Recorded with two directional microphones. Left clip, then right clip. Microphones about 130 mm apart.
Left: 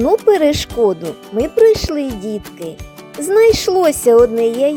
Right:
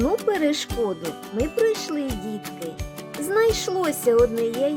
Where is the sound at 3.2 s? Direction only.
45° left (ahead or behind).